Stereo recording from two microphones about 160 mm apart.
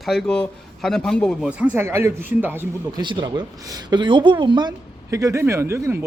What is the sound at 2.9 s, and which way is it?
A woman's voice, 30° right (ahead or behind).